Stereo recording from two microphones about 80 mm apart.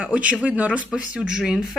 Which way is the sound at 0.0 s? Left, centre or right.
Centre.